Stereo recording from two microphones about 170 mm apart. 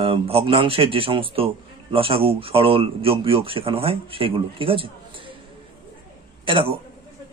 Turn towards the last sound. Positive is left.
turn(degrees=-30)  # may be behind; listen again after turning